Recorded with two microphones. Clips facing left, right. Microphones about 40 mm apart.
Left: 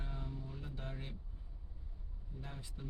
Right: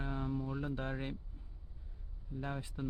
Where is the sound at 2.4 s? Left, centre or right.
Right.